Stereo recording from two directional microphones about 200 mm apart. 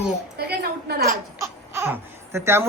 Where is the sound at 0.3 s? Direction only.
55° right (ahead or behind).